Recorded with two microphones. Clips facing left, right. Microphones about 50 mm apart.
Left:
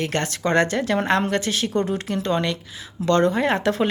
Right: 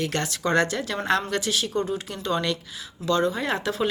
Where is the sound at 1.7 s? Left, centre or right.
Left.